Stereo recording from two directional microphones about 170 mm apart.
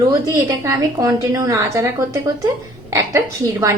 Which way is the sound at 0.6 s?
20° right (ahead or behind).